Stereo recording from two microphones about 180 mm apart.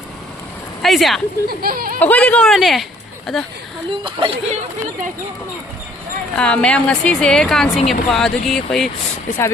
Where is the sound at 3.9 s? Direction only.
30° right (ahead or behind).